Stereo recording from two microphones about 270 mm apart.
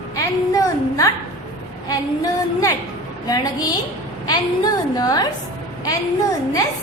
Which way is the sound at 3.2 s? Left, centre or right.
Centre.